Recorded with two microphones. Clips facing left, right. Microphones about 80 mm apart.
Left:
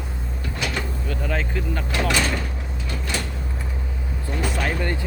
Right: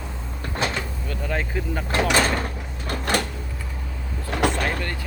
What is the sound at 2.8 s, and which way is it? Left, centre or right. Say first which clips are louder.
Cupboard open or close: right 6 dB; right.